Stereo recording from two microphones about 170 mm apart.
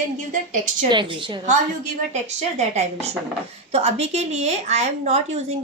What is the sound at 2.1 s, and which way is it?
A woman's voice, 40° right (ahead or behind).